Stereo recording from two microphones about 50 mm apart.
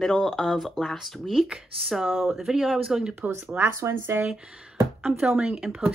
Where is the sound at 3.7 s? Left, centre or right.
Right.